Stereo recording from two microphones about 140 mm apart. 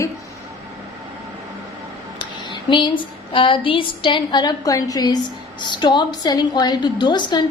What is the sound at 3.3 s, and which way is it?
A woman's voice, 40° left (ahead or behind).